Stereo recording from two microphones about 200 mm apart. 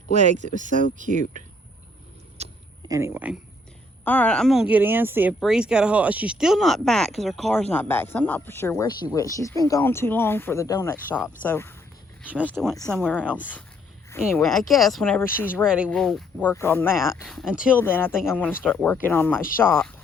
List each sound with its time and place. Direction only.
0.1 s speech: 35° right (ahead or behind)
2.4 s a sound: 30° right (ahead or behind)
2.8 s speech: 15° right (ahead or behind)
4.0 s speech: 5° left (ahead or behind)
12.3 s speech: 5° right (ahead or behind)
14.3 s speech: centre (ahead or behind)
15.6 s speech: 5° right (ahead or behind); by 17.0 s 10° left (ahead or behind)
17.0 s speech: centre (ahead or behind)
17.7 s speech: 10° left (ahead or behind)